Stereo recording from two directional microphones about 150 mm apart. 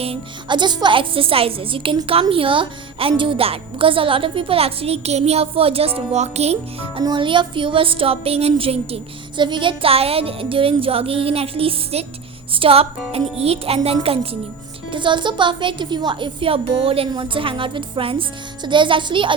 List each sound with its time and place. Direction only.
0.0 s a woman's voice: 35° right (ahead or behind)
7.0 s a woman's voice: 30° right (ahead or behind)